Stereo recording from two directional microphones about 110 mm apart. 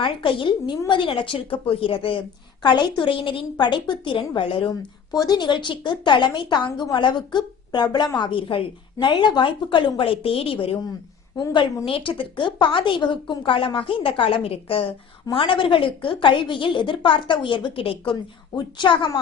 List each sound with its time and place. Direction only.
0.0 s a woman's voice: 50° left (ahead or behind)
5.1 s a woman's voice: 35° left (ahead or behind); by 10.8 s 55° left (ahead or behind)
11.3 s a woman's voice: 45° left (ahead or behind)